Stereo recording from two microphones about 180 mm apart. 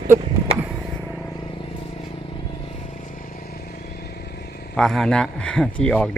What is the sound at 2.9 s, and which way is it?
Vehicle, 45° left (ahead or behind).